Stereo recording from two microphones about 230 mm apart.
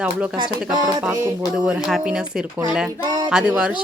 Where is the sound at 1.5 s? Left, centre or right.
Centre.